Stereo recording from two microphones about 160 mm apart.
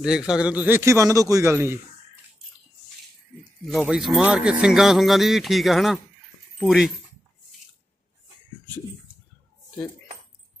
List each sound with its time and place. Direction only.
0.0 s a man's voice: 5° right (ahead or behind)
3.6 s speech: 5° right (ahead or behind)